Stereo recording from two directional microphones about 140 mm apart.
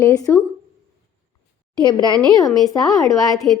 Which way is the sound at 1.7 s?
30° left (ahead or behind).